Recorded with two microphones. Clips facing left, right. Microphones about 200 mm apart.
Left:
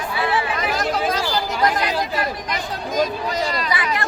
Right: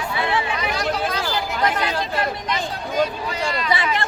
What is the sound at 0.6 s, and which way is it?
Chatter, centre (ahead or behind).